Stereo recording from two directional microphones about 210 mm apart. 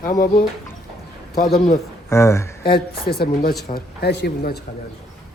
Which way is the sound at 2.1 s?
15° left (ahead or behind).